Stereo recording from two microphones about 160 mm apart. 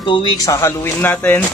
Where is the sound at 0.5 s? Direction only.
15° left (ahead or behind).